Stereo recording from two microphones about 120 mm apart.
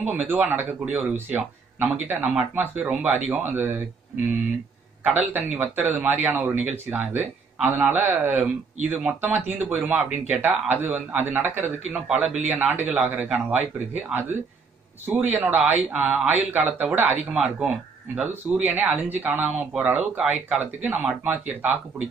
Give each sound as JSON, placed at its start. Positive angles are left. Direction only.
{"t": 0.0, "sound": "speech", "side_deg": -15}
{"t": 5.2, "sound": "speech", "side_deg": -15}